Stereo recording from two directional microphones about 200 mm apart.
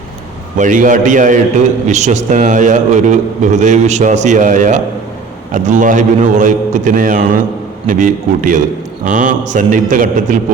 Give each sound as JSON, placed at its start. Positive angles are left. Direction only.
{"t": 0.6, "sound": "a man's voice", "side_deg": -40}